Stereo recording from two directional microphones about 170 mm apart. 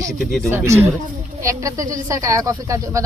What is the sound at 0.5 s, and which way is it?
Speech, 15° right (ahead or behind).